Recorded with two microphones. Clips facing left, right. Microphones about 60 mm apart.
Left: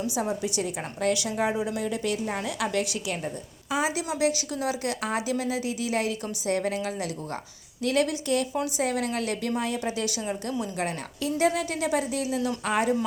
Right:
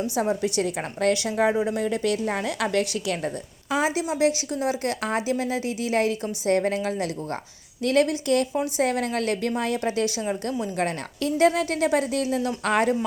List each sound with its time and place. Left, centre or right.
0.1 s a woman's voice: right
3.7 s a woman's voice: right
10.8 s a woman's voice: right